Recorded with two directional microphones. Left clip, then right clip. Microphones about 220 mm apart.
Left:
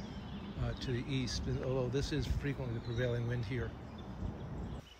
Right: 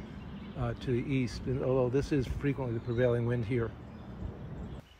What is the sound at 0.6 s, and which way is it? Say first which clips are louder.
Speech: right 7 dB; 20° right (ahead or behind).